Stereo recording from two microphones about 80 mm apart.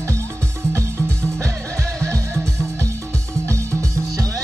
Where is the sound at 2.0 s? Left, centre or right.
Right.